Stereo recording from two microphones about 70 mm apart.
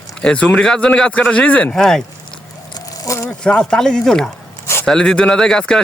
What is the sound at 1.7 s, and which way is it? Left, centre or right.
Speech, centre.